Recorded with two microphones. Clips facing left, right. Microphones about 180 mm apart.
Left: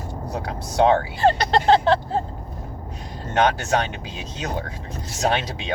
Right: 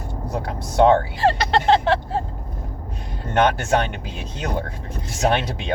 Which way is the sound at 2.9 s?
55° right (ahead or behind).